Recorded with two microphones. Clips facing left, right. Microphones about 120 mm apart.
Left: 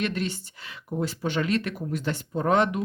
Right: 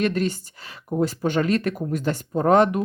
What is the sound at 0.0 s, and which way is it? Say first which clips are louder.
Speech: right 6 dB; 45° right (ahead or behind).